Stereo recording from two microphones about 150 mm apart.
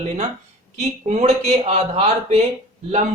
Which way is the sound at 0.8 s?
50° right (ahead or behind).